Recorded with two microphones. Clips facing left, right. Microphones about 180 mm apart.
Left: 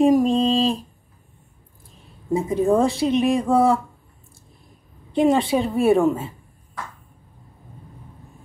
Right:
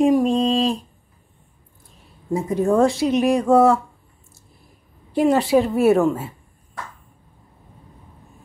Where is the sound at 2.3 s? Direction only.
Centre (ahead or behind).